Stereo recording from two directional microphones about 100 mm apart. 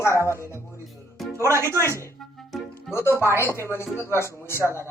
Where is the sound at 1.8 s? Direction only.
30° left (ahead or behind).